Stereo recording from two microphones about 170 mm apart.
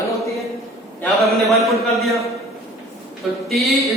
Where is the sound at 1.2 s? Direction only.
Centre (ahead or behind).